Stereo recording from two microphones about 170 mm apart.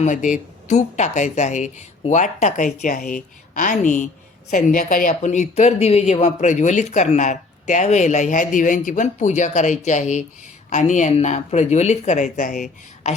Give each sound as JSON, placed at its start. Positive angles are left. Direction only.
{"t": 0.0, "sound": "speech", "side_deg": 50}